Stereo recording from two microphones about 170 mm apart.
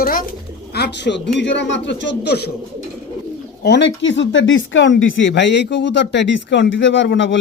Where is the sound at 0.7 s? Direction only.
80° left.